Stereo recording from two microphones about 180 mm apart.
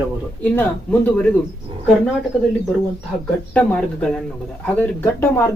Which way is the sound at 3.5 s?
5° left (ahead or behind).